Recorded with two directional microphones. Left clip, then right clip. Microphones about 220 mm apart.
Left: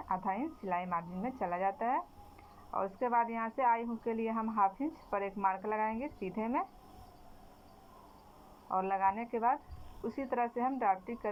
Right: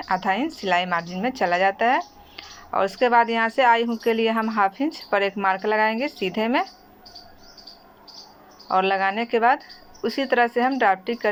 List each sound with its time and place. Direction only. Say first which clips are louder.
0.0 s a woman's voice: right 13 dB; 60° right (ahead or behind)
2.6 s speech: right 14 dB; 65° right (ahead or behind)
8.6 s speech: right 11 dB; 65° right (ahead or behind)
10.0 s speech: right 14 dB; 55° right (ahead or behind)